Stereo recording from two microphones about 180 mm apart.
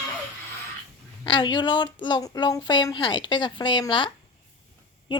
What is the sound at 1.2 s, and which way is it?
Speech, 25° left (ahead or behind).